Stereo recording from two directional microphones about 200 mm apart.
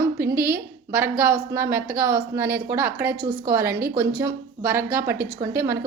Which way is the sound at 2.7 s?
15° right (ahead or behind).